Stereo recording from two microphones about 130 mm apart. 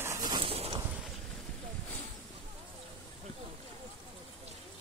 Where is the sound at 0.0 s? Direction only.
25° right (ahead or behind).